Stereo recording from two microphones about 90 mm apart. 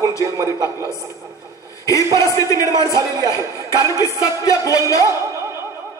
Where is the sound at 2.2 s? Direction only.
35° left (ahead or behind).